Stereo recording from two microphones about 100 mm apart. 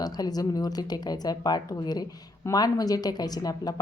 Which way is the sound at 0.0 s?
40° left (ahead or behind).